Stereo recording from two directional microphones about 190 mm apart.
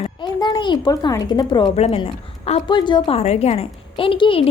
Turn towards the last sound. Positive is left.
turn(degrees=30)  # may be behind; listen again after turning